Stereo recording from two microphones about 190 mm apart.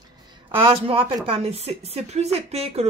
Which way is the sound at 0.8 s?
30° right (ahead or behind).